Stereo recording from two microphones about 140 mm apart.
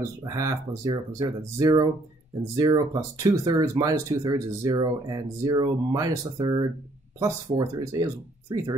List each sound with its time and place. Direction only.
0.2 s speech: 25° right (ahead or behind)